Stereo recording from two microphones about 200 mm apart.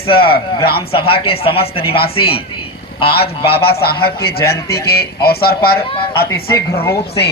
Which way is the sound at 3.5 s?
50° left (ahead or behind).